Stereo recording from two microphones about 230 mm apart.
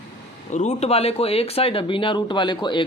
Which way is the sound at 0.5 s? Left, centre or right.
Left.